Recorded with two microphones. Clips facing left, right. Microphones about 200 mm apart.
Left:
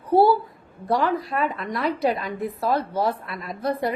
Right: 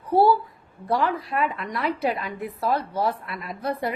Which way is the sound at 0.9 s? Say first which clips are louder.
Left 1 dB; 35° left (ahead or behind).